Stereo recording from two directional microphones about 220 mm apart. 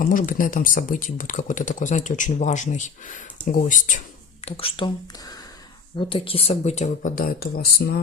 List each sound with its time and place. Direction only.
0.0 s speech: 35° left (ahead or behind)
4.4 s speech: 25° left (ahead or behind)
6.0 s speech: 25° left (ahead or behind); by 8.0 s 45° left (ahead or behind)